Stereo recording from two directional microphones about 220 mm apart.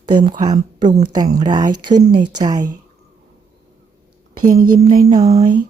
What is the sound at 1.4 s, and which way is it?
Speech, 20° right (ahead or behind).